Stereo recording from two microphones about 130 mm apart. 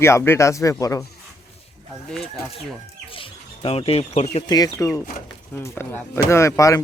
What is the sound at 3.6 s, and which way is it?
Speech, 50° left (ahead or behind).